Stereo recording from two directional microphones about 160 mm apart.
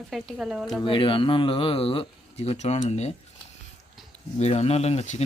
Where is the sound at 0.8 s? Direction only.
30° left (ahead or behind).